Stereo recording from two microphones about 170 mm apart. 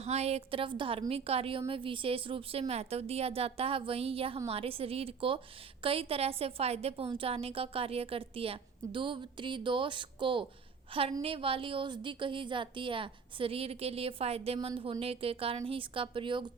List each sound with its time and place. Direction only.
0.0 s a woman's voice: 40° right (ahead or behind)